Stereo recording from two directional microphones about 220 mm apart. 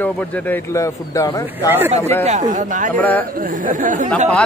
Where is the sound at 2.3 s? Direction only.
35° right (ahead or behind).